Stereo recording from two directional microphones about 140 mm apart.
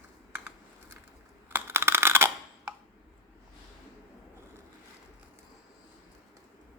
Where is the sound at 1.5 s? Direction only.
15° right (ahead or behind).